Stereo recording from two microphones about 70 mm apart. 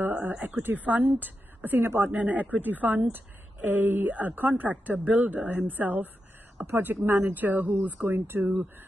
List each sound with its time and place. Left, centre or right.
0.0 s speech: right